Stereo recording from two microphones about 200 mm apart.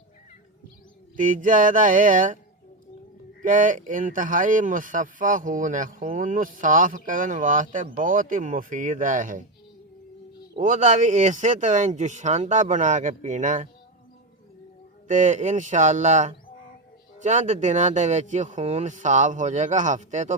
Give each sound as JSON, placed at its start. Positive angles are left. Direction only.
{"t": 1.1, "sound": "speech", "side_deg": -40}
{"t": 3.4, "sound": "speech", "side_deg": -40}
{"t": 10.6, "sound": "speech", "side_deg": -40}
{"t": 15.0, "sound": "speech", "side_deg": -40}